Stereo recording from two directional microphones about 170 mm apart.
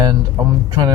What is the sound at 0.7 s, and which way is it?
Speech, 20° right (ahead or behind).